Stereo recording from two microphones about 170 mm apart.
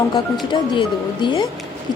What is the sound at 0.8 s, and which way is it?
Speech, 30° left (ahead or behind).